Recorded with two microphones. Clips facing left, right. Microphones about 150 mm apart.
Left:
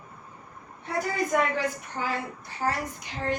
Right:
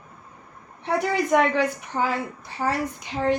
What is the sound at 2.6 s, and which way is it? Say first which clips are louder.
Speech: right 3 dB; 65° right (ahead or behind).